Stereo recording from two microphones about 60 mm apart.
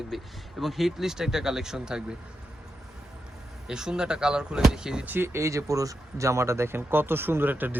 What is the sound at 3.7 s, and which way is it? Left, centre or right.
Speech, centre.